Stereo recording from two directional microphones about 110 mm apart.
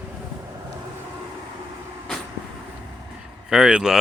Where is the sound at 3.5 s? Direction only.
10° right (ahead or behind).